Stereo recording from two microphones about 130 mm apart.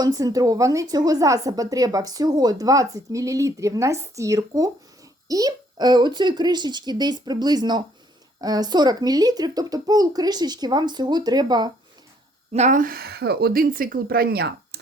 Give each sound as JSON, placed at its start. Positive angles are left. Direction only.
{"t": 0.0, "sound": "a woman's voice", "side_deg": -30}
{"t": 12.5, "sound": "speech", "side_deg": -75}
{"t": 13.5, "sound": "speech", "side_deg": -90}